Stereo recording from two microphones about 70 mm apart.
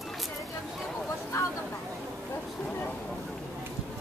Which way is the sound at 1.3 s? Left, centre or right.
Left.